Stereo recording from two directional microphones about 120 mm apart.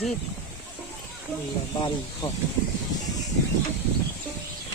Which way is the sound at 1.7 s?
35° left (ahead or behind).